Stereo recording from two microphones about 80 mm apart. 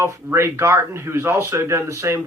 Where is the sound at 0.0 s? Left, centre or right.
Right.